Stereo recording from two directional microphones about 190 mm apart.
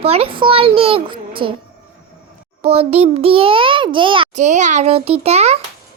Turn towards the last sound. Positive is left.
turn(degrees=-35)  # may be behind; listen again after turning